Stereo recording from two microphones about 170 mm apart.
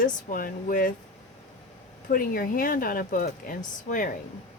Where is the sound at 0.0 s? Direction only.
55° left (ahead or behind).